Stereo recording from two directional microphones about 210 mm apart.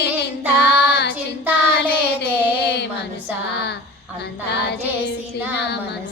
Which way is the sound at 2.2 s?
55° left (ahead or behind).